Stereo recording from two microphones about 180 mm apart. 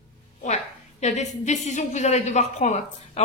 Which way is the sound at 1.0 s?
40° left (ahead or behind).